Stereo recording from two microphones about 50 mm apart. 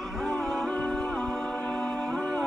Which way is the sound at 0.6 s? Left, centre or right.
Centre.